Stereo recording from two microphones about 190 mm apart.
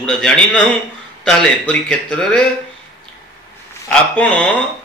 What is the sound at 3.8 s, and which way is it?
Speech, 5° left (ahead or behind).